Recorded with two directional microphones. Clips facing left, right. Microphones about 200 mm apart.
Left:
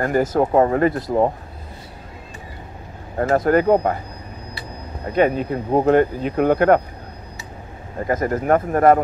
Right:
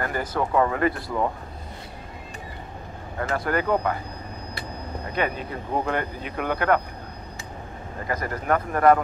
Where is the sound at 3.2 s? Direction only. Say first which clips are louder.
Left 9 dB; 45° left (ahead or behind).